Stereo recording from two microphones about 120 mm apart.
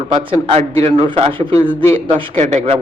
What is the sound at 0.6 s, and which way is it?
A man's voice, 60° right (ahead or behind).